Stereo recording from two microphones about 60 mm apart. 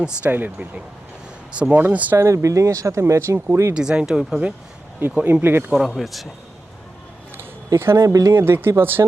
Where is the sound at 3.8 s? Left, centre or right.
Centre.